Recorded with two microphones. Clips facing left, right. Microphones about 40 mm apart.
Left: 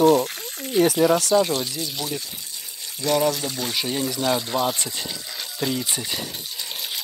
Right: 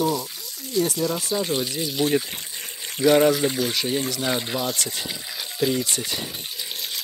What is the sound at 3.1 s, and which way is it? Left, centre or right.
Speech, centre.